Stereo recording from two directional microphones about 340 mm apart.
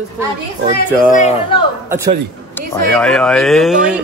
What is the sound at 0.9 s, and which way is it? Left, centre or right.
Speech, left.